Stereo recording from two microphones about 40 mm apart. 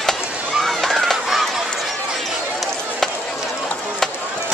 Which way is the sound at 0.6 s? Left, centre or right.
Centre.